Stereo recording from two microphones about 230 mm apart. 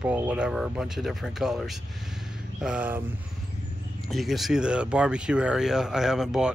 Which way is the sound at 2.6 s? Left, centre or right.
Centre.